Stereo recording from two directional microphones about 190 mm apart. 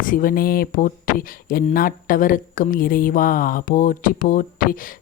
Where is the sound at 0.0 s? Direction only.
45° left (ahead or behind).